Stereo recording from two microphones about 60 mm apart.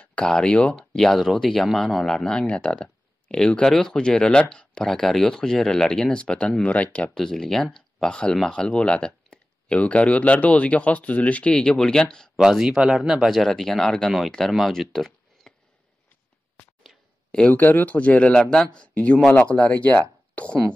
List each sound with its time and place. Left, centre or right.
0.2 s speech: centre
7.2 s speech: centre
12.4 s speech: centre
13.4 s speech: centre
16.8 s a sound: centre
17.5 s speech: left
18.3 s speech: centre